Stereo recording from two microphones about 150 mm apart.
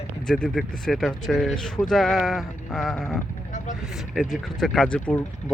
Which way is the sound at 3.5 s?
55° left (ahead or behind).